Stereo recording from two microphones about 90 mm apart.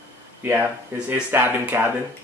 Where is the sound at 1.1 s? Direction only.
25° right (ahead or behind).